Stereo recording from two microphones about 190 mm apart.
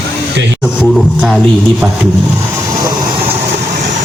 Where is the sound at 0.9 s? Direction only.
Centre (ahead or behind).